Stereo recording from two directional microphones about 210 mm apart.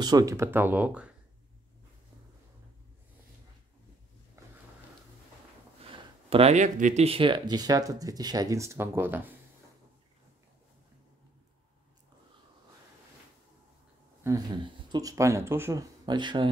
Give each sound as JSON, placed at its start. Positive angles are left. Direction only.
{"t": 0.0, "sound": "speech", "side_deg": -15}
{"t": 6.3, "sound": "speech", "side_deg": -30}
{"t": 14.2, "sound": "speech", "side_deg": -20}